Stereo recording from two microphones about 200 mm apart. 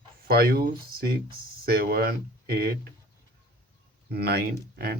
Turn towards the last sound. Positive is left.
turn(degrees=-50)  # may be behind; listen again after turning